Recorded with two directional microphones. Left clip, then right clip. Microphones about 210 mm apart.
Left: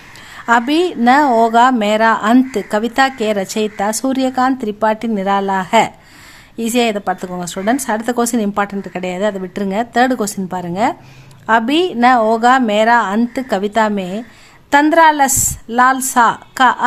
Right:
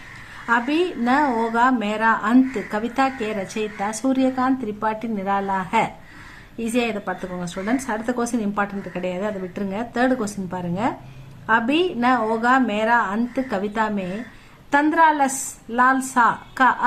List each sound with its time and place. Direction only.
0.4 s a woman's voice: 50° left (ahead or behind)